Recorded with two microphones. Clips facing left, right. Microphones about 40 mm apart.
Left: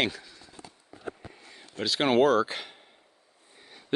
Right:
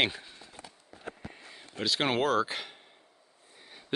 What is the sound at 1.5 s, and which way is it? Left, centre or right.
Speech, centre.